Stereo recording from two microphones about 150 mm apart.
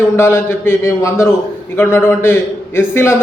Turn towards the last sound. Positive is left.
turn(degrees=15)  # may be behind; listen again after turning